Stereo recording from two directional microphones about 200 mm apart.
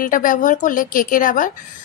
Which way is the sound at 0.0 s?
45° left (ahead or behind).